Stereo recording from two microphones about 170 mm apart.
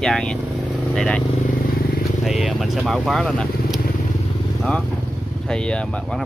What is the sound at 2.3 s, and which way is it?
Speech, centre (ahead or behind).